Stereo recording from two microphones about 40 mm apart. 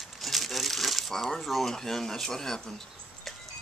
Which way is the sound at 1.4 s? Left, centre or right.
Centre.